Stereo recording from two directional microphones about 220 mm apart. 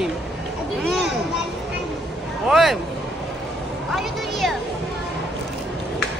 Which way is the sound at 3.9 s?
Centre (ahead or behind).